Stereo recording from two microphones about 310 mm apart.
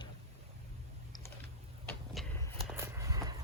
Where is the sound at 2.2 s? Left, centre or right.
Centre.